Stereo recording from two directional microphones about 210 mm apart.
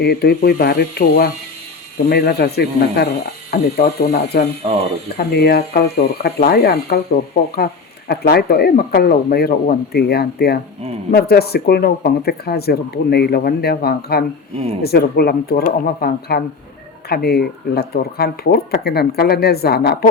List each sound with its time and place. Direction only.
0.0 s speech: 50° left (ahead or behind)
4.6 s speech: 25° right (ahead or behind)
5.1 s speech: 50° left (ahead or behind)